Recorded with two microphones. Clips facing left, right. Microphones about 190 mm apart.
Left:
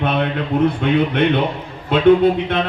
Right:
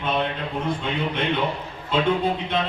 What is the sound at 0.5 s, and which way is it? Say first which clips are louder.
Speech: left 14 dB; 60° left (ahead or behind).